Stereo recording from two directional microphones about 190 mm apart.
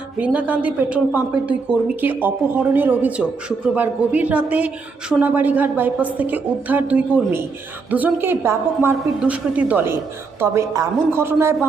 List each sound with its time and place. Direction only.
0.2 s a woman's voice: 10° right (ahead or behind)